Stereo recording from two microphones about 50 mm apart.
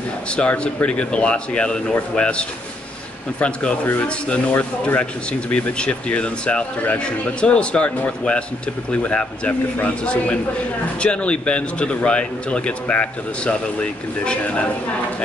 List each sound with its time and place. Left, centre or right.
0.4 s speech: centre